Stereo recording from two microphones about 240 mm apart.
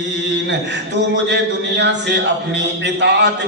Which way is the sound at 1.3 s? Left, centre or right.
Right.